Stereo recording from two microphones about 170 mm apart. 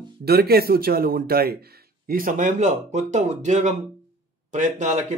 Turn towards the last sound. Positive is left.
turn(degrees=-45)  # may be behind; listen again after turning